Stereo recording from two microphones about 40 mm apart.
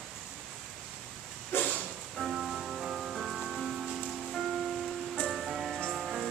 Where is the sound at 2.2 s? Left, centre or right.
Centre.